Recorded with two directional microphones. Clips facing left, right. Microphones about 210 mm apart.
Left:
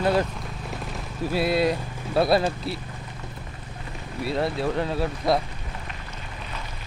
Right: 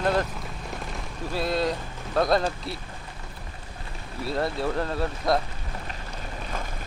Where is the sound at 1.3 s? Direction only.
10° left (ahead or behind).